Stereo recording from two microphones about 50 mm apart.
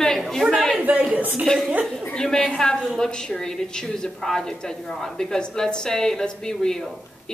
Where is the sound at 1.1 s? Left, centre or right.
Right.